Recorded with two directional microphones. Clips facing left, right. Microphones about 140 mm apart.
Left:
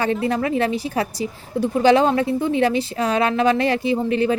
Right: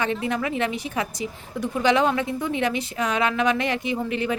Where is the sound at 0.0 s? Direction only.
35° left (ahead or behind).